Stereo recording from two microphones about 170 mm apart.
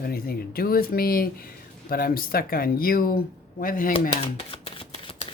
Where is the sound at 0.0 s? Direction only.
60° left (ahead or behind).